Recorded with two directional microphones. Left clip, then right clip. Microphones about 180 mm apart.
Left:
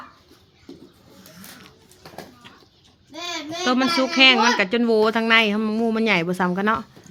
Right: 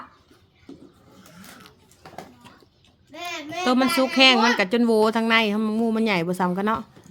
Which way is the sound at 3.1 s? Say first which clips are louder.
Left 1 dB; 35° right (ahead or behind).